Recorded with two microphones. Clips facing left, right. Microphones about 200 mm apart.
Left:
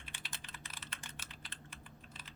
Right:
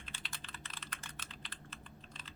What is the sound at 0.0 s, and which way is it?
Computer keyboard, 15° left (ahead or behind).